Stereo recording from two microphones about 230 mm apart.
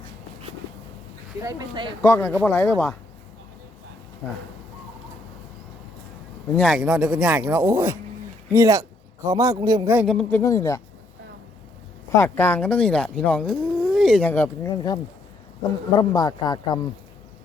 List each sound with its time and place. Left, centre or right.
1.4 s speech: centre
2.0 s speech: centre
4.2 s speech: centre
6.6 s a man's voice: centre
10.1 s speech: centre
12.1 s speech: centre
16.0 s speech: centre